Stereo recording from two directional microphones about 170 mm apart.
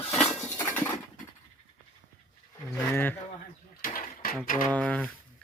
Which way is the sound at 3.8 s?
60° left (ahead or behind).